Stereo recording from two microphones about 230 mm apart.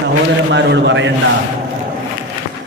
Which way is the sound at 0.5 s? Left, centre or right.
Right.